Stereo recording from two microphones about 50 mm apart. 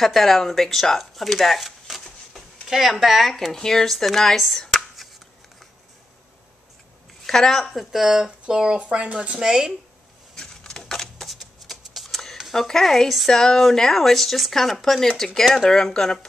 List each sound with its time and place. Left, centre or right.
0.0 s speech: centre
7.2 s speech: centre
8.0 s speech: centre
10.3 s a sound: centre
11.3 s shuffling cards: centre
12.5 s a woman's voice: centre